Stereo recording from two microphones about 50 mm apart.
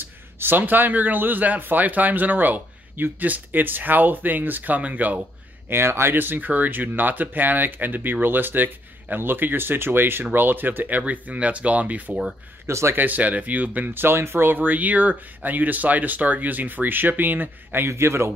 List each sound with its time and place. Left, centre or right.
0.0 s a man's voice: right
5.7 s a man's voice: right
12.1 s speech: centre
12.6 s speech: right
12.9 s a man's voice: right
14.0 s a man's voice: right
17.8 s a man's voice: right